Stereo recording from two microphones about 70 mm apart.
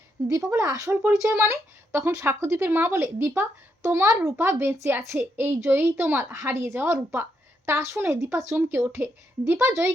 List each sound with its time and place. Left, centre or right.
0.3 s a woman's voice: right
5.5 s speech: right
5.8 s a woman's voice: right
6.3 s a woman's voice: right
6.7 s a woman's voice: right